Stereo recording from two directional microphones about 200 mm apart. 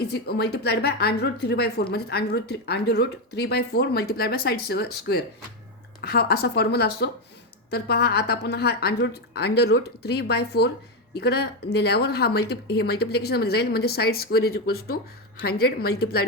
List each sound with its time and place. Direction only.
0.0 s a woman's voice: 55° left (ahead or behind)